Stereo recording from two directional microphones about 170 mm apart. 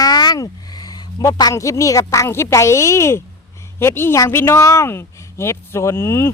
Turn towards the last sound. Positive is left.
turn(degrees=15)  # may be behind; listen again after turning